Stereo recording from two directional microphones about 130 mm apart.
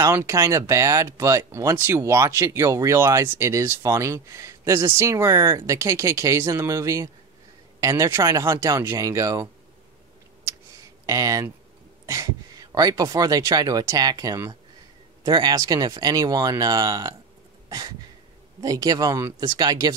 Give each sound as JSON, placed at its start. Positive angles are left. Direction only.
{"t": 0.0, "sound": "speech", "side_deg": -20}
{"t": 11.1, "sound": "speech", "side_deg": -25}
{"t": 17.6, "sound": "a sound", "side_deg": -30}
{"t": 18.6, "sound": "speech", "side_deg": -30}